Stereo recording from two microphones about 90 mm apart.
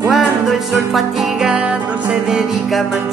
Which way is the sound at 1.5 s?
15° right (ahead or behind).